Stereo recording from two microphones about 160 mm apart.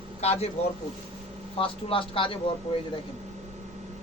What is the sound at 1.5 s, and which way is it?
Speech, 35° left (ahead or behind).